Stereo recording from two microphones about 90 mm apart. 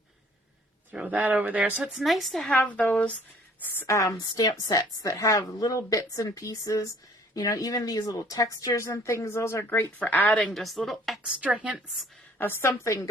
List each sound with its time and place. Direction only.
0.9 s speech: 15° right (ahead or behind)
1.8 s a woman's voice: 5° right (ahead or behind)
2.6 s a woman's voice: 15° left (ahead or behind)
3.8 s a woman's voice: 35° left (ahead or behind); by 10.3 s 15° left (ahead or behind)
10.3 s a woman's voice: 5° left (ahead or behind)
11.2 s speech: 15° right (ahead or behind)
12.4 s a woman's voice: 25° left (ahead or behind)